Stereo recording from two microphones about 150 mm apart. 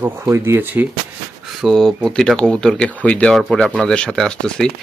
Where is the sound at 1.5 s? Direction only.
Centre (ahead or behind).